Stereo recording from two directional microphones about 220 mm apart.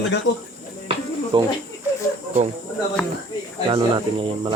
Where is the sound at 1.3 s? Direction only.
20° right (ahead or behind).